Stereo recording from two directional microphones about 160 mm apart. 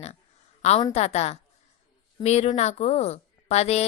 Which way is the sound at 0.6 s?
40° left (ahead or behind).